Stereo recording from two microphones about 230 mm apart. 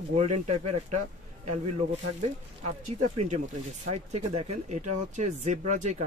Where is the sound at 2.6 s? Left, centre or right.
Right.